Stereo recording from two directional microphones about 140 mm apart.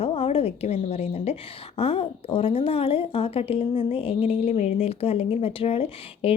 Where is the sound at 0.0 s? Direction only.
45° left (ahead or behind).